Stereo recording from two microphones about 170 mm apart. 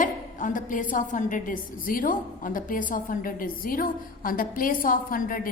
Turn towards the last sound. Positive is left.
turn(degrees=55)  # may be behind; listen again after turning